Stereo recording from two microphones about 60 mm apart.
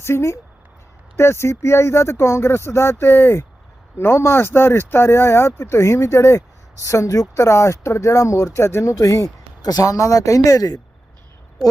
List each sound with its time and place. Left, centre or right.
0.0 s speech: left